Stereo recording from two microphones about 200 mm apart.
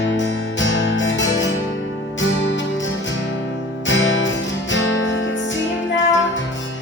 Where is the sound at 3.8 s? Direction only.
70° left (ahead or behind).